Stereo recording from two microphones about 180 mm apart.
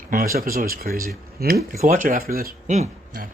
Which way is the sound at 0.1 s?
50° right (ahead or behind).